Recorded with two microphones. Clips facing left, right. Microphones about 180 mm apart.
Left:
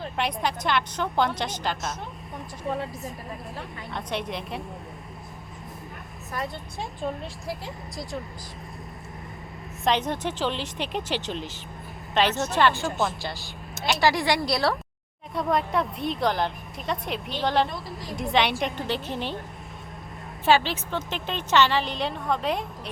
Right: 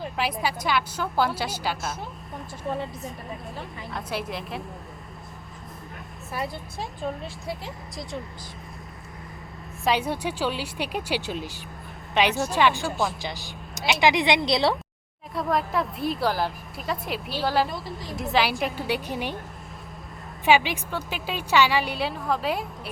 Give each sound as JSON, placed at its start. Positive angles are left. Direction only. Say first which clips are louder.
{"t": 0.0, "sound": "a woman's voice", "louder": "even", "side_deg": -5}
{"t": 6.3, "sound": "a woman's voice", "louder": "right 1 dB", "side_deg": 0}
{"t": 9.8, "sound": "a woman's voice", "louder": "even", "side_deg": -10}
{"t": 12.8, "sound": "a woman's voice", "louder": "even", "side_deg": 0}
{"t": 14.0, "sound": "speech", "louder": "right 2 dB", "side_deg": -20}
{"t": 15.4, "sound": "a woman's voice", "louder": "left 1 dB", "side_deg": 0}
{"t": 20.4, "sound": "a woman's voice", "louder": "right 1 dB", "side_deg": -15}